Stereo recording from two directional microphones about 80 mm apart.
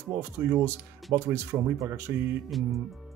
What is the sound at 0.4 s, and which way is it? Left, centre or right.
A man's voice, right.